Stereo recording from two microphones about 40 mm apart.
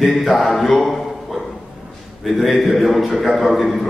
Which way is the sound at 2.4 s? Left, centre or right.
Centre.